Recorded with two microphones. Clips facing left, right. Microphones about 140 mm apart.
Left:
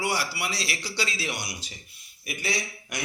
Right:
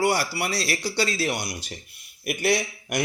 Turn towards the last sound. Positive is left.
turn(degrees=-60)  # may be behind; listen again after turning